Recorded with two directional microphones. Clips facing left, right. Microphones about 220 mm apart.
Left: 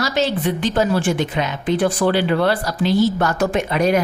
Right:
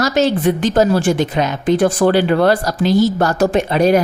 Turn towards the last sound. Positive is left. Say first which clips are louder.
# right 4 dB
turn(degrees=-35)  # may be behind; listen again after turning